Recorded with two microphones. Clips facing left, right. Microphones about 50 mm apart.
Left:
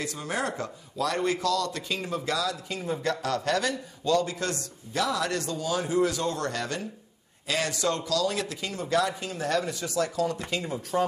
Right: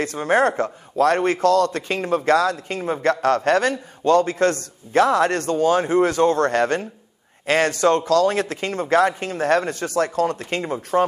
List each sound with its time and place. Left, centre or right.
0.0 s a man's voice: right